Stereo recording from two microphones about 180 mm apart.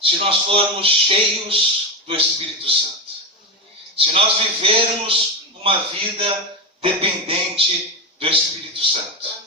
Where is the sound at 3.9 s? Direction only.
30° right (ahead or behind).